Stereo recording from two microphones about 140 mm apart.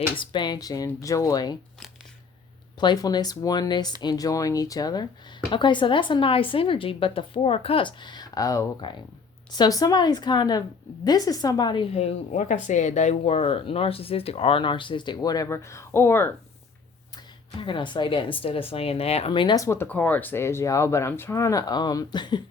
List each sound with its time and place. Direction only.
0.2 s speech: 35° left (ahead or behind)
2.8 s speech: 30° left (ahead or behind)
11.9 s speech: 50° left (ahead or behind); by 16.3 s 15° left (ahead or behind)
17.6 s speech: 35° left (ahead or behind)
19.6 s speech: 20° left (ahead or behind)